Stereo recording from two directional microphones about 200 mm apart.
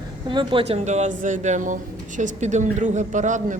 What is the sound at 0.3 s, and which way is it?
Speech, 25° right (ahead or behind).